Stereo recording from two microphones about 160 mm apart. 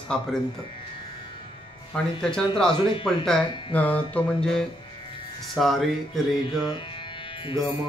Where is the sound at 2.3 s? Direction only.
5° left (ahead or behind).